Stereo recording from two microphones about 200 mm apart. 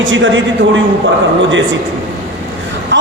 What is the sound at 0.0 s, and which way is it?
Speech, 70° right (ahead or behind).